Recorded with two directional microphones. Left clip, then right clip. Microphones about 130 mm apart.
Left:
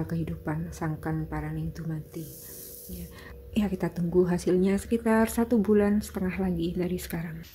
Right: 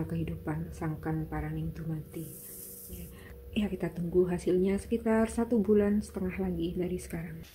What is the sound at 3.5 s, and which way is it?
Speech, 15° left (ahead or behind).